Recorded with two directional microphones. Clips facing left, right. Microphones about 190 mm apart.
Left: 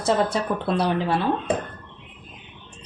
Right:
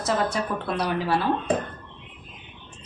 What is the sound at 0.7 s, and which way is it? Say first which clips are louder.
Speech: left 3 dB; 30° left (ahead or behind).